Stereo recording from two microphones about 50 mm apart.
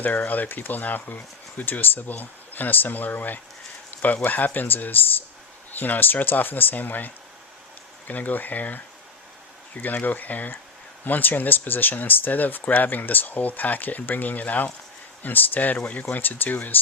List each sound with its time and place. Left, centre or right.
0.0 s speech: left
9.8 s speech: left